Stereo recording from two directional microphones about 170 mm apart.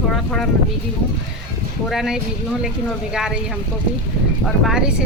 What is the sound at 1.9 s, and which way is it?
Speech, centre (ahead or behind).